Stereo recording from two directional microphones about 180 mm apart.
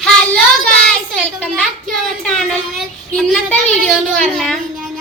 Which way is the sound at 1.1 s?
5° left (ahead or behind).